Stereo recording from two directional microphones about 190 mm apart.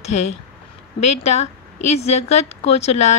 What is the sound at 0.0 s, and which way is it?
A woman's voice, 35° left (ahead or behind).